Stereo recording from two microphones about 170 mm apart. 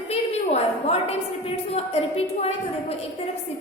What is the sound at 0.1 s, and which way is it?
A woman's voice, 35° left (ahead or behind).